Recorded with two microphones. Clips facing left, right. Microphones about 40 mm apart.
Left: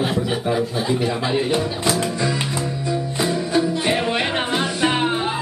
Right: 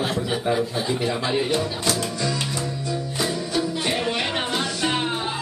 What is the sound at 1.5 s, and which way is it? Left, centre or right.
Speech, centre.